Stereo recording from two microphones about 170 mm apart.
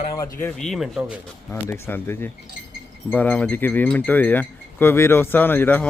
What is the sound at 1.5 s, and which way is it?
Speech, 10° left (ahead or behind).